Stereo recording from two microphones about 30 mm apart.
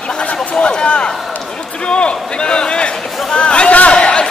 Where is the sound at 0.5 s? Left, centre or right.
Left.